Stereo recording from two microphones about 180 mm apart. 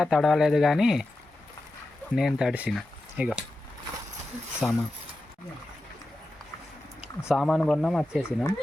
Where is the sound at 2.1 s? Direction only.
Centre (ahead or behind).